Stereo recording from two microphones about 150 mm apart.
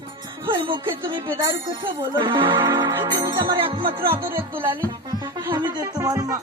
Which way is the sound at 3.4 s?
30° right (ahead or behind).